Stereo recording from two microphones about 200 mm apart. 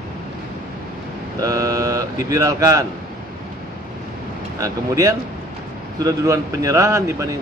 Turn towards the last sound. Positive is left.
turn(degrees=-15)  # may be behind; listen again after turning